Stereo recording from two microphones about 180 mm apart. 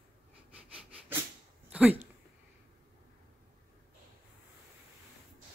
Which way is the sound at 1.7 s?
5° right (ahead or behind).